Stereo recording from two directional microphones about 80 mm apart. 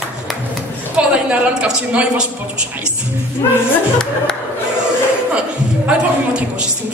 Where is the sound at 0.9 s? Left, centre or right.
Centre.